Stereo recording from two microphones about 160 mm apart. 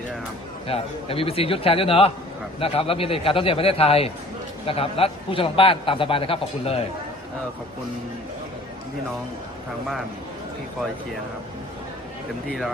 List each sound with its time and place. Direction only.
0.7 s a man's voice: 35° left (ahead or behind)
12.5 s speech: centre (ahead or behind)